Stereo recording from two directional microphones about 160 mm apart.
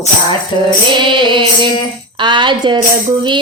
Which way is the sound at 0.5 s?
30° left (ahead or behind).